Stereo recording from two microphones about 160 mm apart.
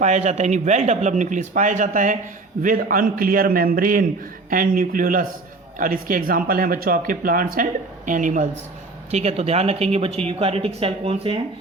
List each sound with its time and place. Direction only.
0.0 s speech: 45° right (ahead or behind)
9.0 s speech: 40° right (ahead or behind)